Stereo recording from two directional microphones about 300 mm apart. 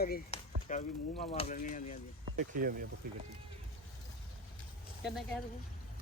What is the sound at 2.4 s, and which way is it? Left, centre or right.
Speech, right.